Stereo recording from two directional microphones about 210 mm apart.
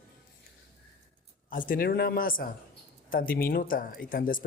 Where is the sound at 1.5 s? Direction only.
40° left (ahead or behind).